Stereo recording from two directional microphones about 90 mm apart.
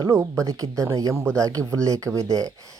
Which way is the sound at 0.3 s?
40° right (ahead or behind).